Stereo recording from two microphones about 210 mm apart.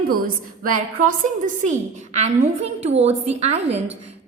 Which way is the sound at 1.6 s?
35° right (ahead or behind).